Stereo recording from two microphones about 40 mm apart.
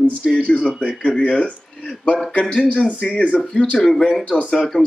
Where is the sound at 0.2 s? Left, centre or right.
Centre.